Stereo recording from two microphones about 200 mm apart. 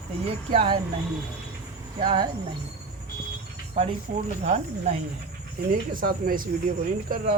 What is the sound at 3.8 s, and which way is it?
Speech, 30° right (ahead or behind).